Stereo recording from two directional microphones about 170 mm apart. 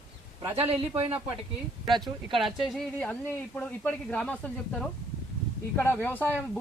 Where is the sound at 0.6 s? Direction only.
35° right (ahead or behind).